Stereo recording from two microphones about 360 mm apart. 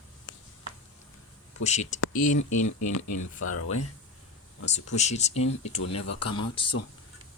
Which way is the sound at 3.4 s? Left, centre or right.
Left.